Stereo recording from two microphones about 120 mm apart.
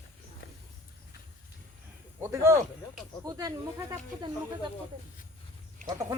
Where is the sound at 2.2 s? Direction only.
25° right (ahead or behind).